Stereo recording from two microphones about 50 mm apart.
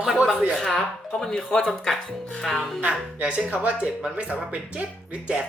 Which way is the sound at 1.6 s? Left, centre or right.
Centre.